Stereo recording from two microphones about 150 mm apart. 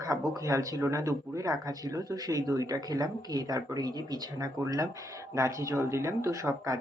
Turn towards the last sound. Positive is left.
turn(degrees=-20)  # may be behind; listen again after turning